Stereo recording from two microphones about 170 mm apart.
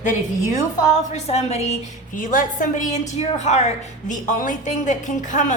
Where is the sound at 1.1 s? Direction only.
40° left (ahead or behind).